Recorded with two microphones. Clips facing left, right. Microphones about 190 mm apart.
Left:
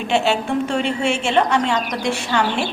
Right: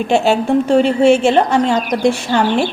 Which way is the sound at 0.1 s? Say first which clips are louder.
Right 5 dB; 40° right (ahead or behind).